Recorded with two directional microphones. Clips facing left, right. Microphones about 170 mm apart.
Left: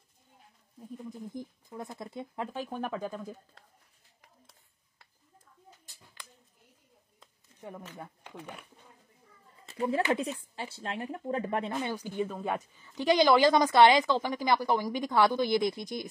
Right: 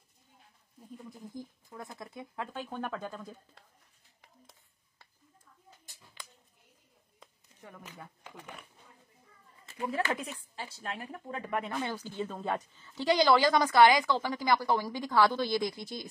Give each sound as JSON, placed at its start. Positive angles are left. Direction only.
{"t": 0.7, "sound": "speech", "side_deg": 20}
{"t": 9.7, "sound": "speech", "side_deg": 30}